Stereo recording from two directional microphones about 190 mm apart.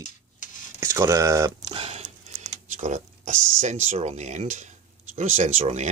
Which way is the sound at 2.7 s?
40° right (ahead or behind).